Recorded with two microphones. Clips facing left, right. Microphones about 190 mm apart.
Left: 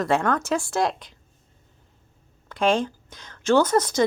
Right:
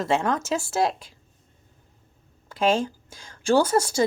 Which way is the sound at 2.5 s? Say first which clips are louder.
Left 1 dB; 25° right (ahead or behind).